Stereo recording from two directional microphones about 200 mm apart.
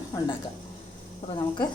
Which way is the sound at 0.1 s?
15° left (ahead or behind).